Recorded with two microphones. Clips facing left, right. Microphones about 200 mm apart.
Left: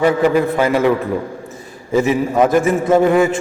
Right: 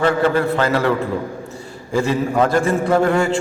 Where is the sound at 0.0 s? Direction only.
15° left (ahead or behind).